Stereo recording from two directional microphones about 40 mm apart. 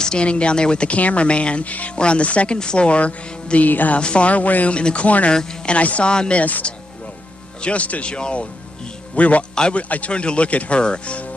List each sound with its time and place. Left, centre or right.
0.0 s speech: left
0.9 s speech: left
3.7 s a woman's voice: left
3.9 s speech: left
4.7 s speech: left
5.0 s speech: left
5.3 s speech: centre
5.7 s speech: left
6.1 s speech: left
6.4 s speech: left
9.6 s speech: left